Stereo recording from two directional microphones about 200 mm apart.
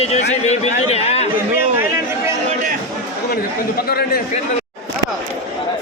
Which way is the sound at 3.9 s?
50° left (ahead or behind).